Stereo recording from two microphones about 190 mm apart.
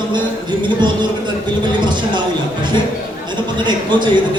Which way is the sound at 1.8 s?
25° right (ahead or behind).